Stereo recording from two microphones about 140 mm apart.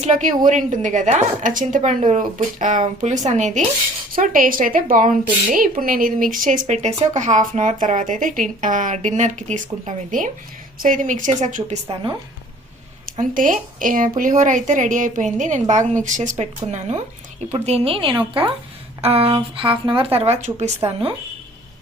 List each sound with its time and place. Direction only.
0.0 s speech: 60° right (ahead or behind)
4.1 s a woman's voice: 75° right (ahead or behind); by 11.8 s 60° right (ahead or behind)
13.1 s speech: 75° right (ahead or behind); by 17.0 s 60° right (ahead or behind)
17.5 s a woman's voice: 45° right (ahead or behind)